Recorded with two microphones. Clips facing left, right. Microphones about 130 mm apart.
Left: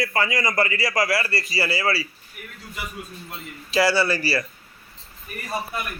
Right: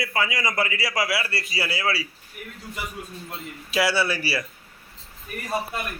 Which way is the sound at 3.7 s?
Centre (ahead or behind).